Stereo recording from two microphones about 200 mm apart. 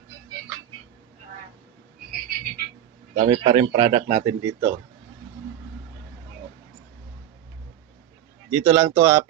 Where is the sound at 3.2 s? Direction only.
35° right (ahead or behind).